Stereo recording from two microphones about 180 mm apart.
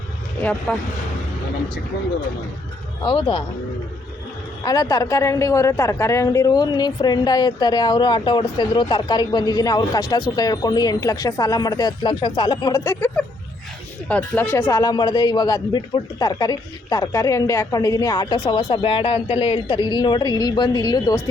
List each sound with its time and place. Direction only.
0.7 s speech: 10° left (ahead or behind)
3.0 s a woman's voice: 25° left (ahead or behind)
4.6 s a woman's voice: 20° left (ahead or behind)